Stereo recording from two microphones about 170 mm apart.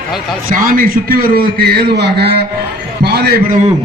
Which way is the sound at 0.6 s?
60° right (ahead or behind).